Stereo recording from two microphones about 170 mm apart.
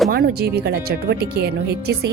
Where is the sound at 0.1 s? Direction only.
65° right (ahead or behind).